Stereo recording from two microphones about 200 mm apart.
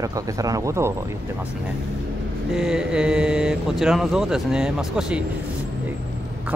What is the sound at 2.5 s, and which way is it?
Speech, 5° right (ahead or behind).